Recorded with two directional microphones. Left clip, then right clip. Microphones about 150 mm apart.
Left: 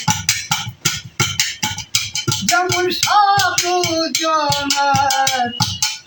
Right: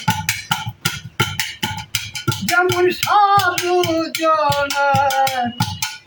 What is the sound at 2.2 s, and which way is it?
Music, 20° right (ahead or behind).